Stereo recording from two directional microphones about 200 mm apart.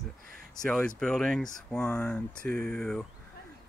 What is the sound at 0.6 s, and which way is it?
Speech, 5° left (ahead or behind).